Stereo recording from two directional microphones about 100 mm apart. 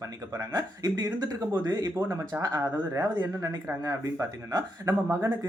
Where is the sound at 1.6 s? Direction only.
45° right (ahead or behind).